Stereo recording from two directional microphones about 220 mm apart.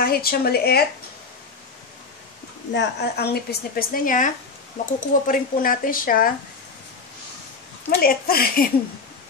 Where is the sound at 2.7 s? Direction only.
50° left (ahead or behind).